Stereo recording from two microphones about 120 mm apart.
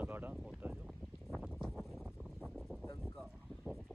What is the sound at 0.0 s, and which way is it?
Boat, 15° right (ahead or behind).